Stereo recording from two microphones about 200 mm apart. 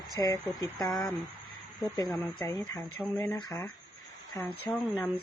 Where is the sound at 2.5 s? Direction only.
15° left (ahead or behind).